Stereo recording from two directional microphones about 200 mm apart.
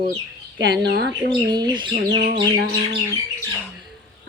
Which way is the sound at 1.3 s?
20° right (ahead or behind).